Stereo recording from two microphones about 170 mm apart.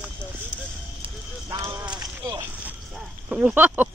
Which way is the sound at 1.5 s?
20° right (ahead or behind).